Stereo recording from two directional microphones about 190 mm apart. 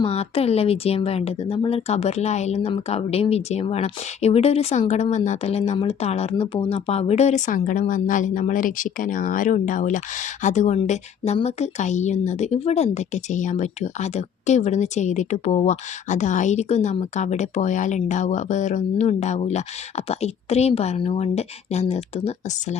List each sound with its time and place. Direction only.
0.0 s speech: 30° left (ahead or behind)